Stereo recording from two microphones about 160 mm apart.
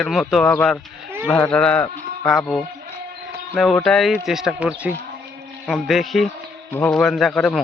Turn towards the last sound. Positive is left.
turn(degrees=5)  # may be behind; listen again after turning